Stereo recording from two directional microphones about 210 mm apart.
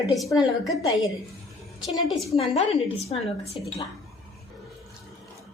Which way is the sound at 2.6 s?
30° left (ahead or behind).